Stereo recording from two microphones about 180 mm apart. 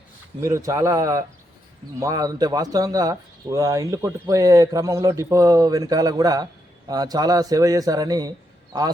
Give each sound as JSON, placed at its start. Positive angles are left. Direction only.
{"t": 0.4, "sound": "a man's voice", "side_deg": -15}